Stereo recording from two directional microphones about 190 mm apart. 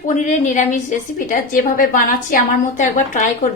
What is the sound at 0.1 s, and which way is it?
A woman's voice, 40° left (ahead or behind).